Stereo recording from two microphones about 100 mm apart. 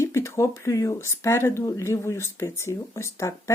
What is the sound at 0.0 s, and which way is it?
Speech, 30° left (ahead or behind).